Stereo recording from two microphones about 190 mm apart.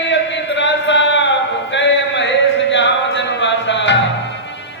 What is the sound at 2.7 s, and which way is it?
Music, 70° left (ahead or behind).